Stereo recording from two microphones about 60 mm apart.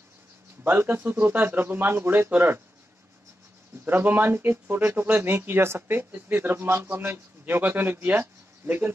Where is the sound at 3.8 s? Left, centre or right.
Right.